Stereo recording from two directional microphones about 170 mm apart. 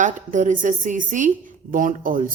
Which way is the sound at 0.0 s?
50° right (ahead or behind).